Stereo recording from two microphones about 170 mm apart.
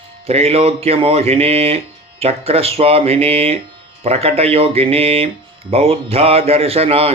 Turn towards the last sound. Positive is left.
turn(degrees=-35)  # may be behind; listen again after turning